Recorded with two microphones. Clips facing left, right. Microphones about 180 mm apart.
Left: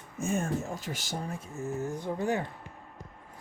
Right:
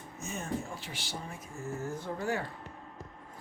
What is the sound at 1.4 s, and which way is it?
Speech, 20° left (ahead or behind).